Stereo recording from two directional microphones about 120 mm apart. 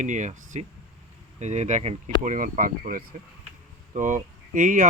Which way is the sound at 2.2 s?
90° right.